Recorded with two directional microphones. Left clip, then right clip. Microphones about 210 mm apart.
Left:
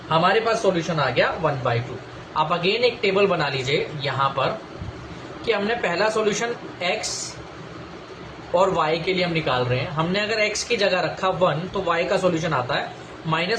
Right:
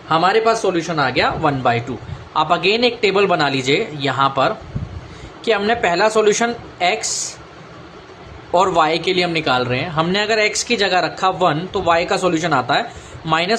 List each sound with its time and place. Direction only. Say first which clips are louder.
0.1 s a man's voice: right 5 dB; 55° right (ahead or behind)
8.5 s a man's voice: right 5 dB; 55° right (ahead or behind)